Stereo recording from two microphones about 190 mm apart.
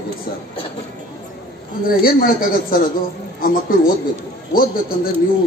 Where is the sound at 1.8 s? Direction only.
50° left (ahead or behind).